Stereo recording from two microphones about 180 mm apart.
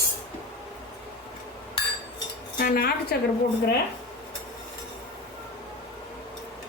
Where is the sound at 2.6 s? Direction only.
50° left (ahead or behind).